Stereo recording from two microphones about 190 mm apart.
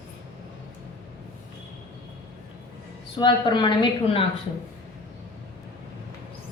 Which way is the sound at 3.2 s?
25° left (ahead or behind).